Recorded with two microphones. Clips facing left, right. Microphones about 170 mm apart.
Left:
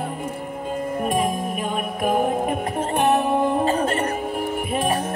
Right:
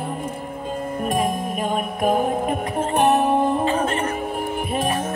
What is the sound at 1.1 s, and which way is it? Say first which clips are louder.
Music: right 1 dB; 45° right (ahead or behind).